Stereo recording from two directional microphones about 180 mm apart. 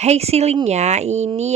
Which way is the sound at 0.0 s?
35° right (ahead or behind).